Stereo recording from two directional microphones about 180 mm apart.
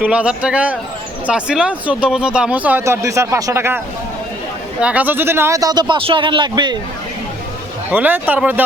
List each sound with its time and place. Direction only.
0.0 s speech: 5° right (ahead or behind)
4.8 s speech: 5° right (ahead or behind); by 6.7 s 25° right (ahead or behind)
7.9 s speech: 10° right (ahead or behind)